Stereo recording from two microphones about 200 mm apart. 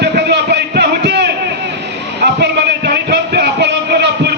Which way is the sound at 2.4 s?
55° right (ahead or behind).